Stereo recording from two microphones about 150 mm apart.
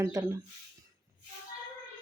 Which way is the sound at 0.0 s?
20° right (ahead or behind).